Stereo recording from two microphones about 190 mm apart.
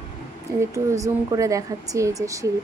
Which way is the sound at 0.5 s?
15° right (ahead or behind).